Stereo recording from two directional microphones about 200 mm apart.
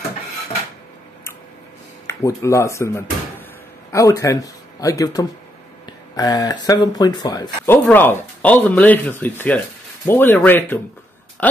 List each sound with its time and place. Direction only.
2.0 s speech: 15° left (ahead or behind)